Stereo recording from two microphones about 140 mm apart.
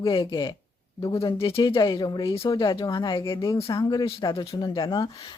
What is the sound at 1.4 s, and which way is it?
Speech, 40° left (ahead or behind).